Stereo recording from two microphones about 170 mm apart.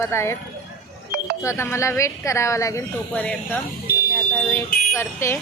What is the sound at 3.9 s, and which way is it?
Fire alarm, 70° left (ahead or behind).